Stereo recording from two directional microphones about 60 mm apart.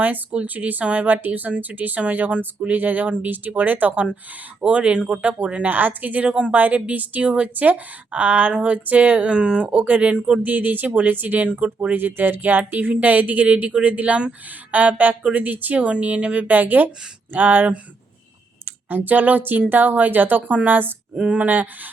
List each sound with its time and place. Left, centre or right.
0.0 s speech: right
5.6 s speech: right
10.4 s speech: right